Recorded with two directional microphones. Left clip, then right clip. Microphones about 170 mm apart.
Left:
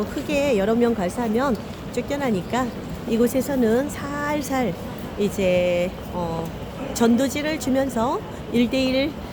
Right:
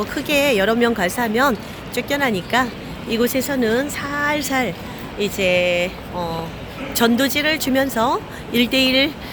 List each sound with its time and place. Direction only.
0.1 s speech: centre (ahead or behind)
3.1 s speech: 15° left (ahead or behind)